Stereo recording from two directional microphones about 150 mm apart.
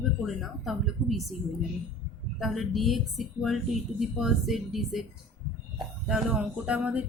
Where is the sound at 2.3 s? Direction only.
Centre (ahead or behind).